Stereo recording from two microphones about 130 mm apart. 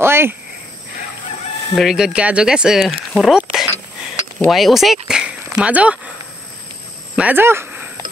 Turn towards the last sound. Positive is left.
turn(degrees=-15)  # may be behind; listen again after turning